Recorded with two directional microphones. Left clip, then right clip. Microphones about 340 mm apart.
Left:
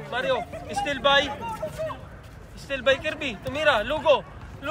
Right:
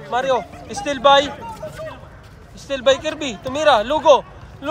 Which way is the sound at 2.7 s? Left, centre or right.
Centre.